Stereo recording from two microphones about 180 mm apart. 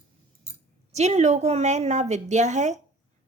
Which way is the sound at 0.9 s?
40° right (ahead or behind).